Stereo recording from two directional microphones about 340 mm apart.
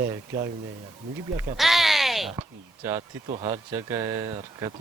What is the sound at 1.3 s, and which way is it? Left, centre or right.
Speech, centre.